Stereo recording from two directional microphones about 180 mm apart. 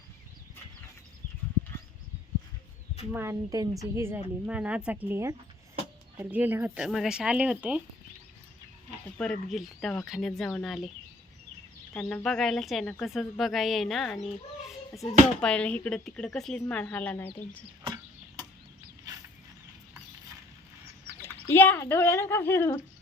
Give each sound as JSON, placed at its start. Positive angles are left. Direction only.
{"t": 3.1, "sound": "a woman's voice", "side_deg": -15}
{"t": 9.0, "sound": "a woman's voice", "side_deg": 5}
{"t": 11.9, "sound": "a woman's voice", "side_deg": 5}
{"t": 17.8, "sound": "chop", "side_deg": -20}
{"t": 21.2, "sound": "speech", "side_deg": 10}